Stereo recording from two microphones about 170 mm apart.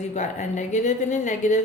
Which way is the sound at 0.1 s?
45° left (ahead or behind).